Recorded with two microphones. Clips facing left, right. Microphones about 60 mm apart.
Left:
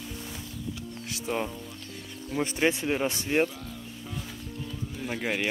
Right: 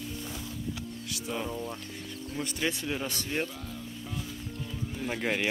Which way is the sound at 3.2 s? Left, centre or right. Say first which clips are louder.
Left 9 dB; left.